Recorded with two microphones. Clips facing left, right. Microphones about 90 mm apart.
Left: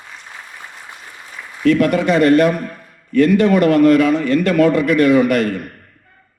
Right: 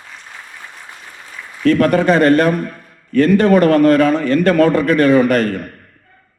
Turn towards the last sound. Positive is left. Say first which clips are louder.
# right 1 dB
turn(degrees=-40)  # may be behind; listen again after turning